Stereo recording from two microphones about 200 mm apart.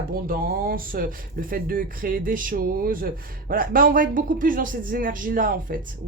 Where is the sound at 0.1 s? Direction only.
45° right (ahead or behind).